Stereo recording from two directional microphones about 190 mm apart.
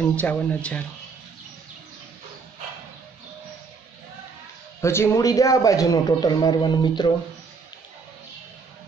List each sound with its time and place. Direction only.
0.0 s speech: 5° left (ahead or behind)
4.8 s a man's voice: 15° left (ahead or behind)